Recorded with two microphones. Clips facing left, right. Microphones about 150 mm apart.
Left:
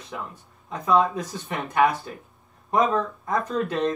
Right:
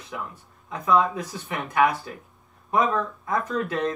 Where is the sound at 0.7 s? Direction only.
35° left (ahead or behind).